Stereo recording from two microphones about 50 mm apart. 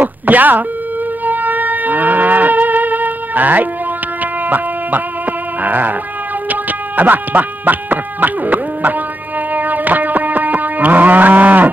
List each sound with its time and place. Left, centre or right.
0.0 s beep: right
1.2 s livestock: right
5.6 s a sound: right
9.5 s cattle: right